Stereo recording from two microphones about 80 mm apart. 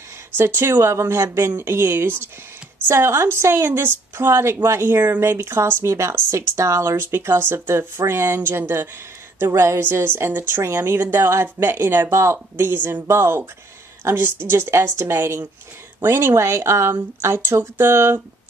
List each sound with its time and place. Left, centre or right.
0.4 s a woman's voice: right